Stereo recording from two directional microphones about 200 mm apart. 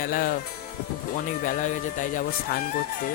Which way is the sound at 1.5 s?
40° left (ahead or behind).